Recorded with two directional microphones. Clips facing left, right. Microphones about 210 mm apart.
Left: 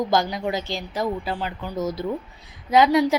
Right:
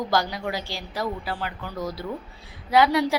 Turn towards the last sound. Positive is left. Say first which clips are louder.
# left 3 dB
turn(degrees=20)  # may be behind; listen again after turning